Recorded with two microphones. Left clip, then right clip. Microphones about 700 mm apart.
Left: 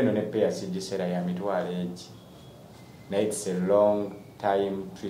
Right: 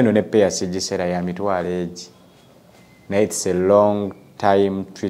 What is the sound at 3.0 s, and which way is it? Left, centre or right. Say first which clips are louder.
Speech: right 8 dB; right.